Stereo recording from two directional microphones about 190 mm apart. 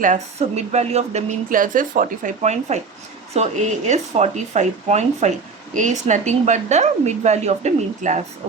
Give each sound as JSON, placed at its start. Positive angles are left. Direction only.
{"t": 0.0, "sound": "speech", "side_deg": -40}